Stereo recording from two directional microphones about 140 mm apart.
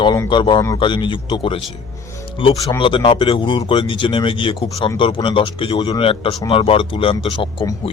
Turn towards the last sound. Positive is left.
turn(degrees=40)  # may be behind; listen again after turning